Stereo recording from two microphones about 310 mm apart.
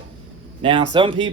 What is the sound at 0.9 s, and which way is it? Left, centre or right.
Speech, centre.